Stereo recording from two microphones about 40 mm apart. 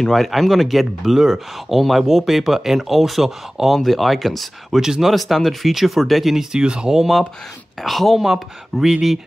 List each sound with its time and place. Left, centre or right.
0.1 s speech: centre
3.7 s speech: centre
6.5 s speech: right
7.0 s speech: centre